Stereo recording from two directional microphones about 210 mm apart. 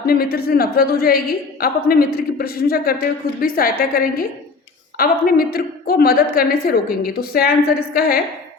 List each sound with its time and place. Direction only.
0.0 s a woman's voice: 45° left (ahead or behind)